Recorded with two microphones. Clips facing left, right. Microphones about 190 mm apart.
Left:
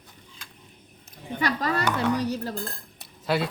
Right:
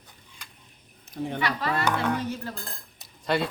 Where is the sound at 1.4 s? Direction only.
40° left (ahead or behind).